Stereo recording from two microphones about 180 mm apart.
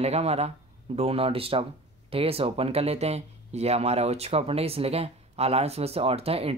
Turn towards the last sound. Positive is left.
turn(degrees=-35)  # may be behind; listen again after turning